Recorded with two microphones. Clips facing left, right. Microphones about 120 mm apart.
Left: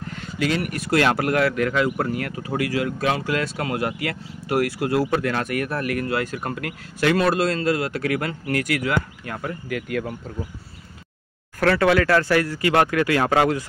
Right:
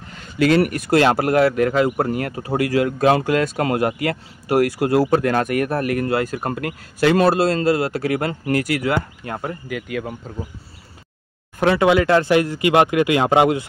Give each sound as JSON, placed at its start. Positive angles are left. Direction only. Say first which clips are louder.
{"t": 0.4, "sound": "speech", "louder": "right 8 dB", "side_deg": -55}
{"t": 0.9, "sound": "speech", "louder": "right 4 dB", "side_deg": -35}
{"t": 9.7, "sound": "speech", "louder": "left 2 dB", "side_deg": -10}
{"t": 11.6, "sound": "speech", "louder": "right 2 dB", "side_deg": -20}